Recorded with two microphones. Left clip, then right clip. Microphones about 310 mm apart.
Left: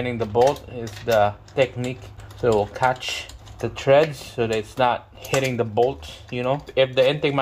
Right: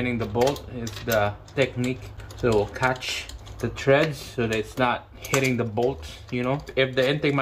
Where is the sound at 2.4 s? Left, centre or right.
Left.